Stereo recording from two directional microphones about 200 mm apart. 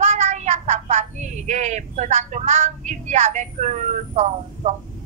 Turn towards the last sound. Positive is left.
turn(degrees=-35)  # may be behind; listen again after turning